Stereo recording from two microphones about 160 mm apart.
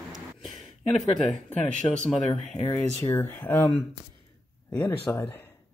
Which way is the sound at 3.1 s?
15° left (ahead or behind).